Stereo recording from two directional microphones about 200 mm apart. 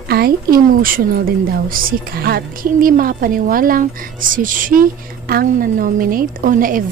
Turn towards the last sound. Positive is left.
turn(degrees=-45)  # may be behind; listen again after turning